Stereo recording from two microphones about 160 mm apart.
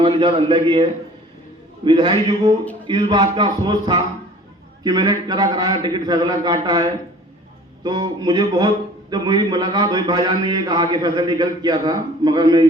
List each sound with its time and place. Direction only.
0.0 s a man's voice: 30° right (ahead or behind)
7.9 s a man's voice: 30° right (ahead or behind)